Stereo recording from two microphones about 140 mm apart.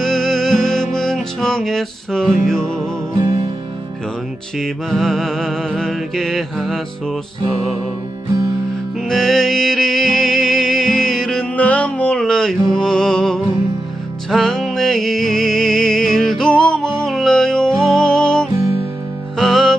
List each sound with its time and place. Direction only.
0.0 s music: 5° left (ahead or behind)
3.2 s music: 30° right (ahead or behind)
4.5 s music: centre (ahead or behind)
9.0 s music: centre (ahead or behind)